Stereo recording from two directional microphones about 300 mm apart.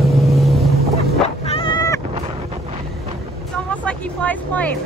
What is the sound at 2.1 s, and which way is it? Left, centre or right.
Wind noise, centre.